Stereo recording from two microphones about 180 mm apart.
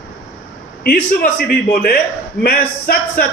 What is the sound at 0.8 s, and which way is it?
A man's voice, 55° left (ahead or behind).